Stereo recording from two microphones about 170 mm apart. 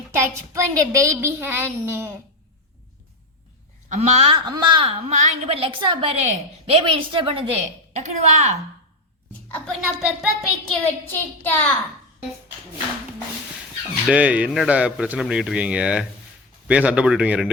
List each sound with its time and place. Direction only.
0.2 s a woman's voice: 20° right (ahead or behind)
3.8 s a woman's voice: 40° right (ahead or behind)
9.5 s a woman's voice: centre (ahead or behind)
10.7 s a child's voice: 10° left (ahead or behind)
14.1 s a woman's voice: 10° right (ahead or behind)